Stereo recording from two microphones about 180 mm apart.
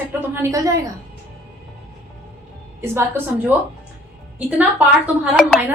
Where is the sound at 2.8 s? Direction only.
15° right (ahead or behind).